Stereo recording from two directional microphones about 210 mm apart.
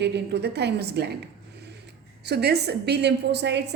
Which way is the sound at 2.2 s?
50° right (ahead or behind).